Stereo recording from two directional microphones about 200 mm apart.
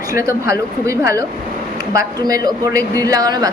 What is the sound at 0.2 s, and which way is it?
A woman's voice, 15° right (ahead or behind).